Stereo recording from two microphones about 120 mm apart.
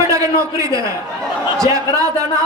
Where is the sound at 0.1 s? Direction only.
25° right (ahead or behind).